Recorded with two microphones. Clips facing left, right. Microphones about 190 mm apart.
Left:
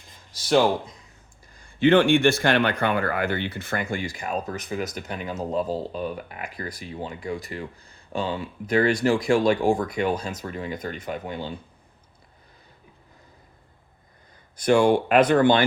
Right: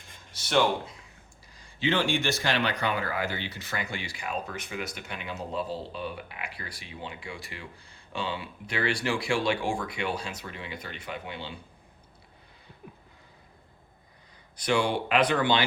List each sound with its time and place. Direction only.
1.5 s speech: 55° left (ahead or behind)
14.5 s speech: 50° left (ahead or behind)